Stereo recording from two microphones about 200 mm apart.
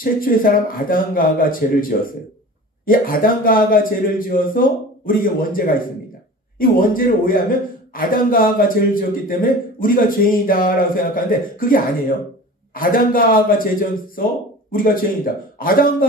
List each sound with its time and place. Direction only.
0.0 s a man's voice: 45° left (ahead or behind)